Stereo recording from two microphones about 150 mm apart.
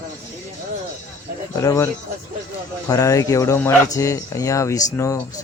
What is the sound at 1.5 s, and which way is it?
Speech, 25° left (ahead or behind).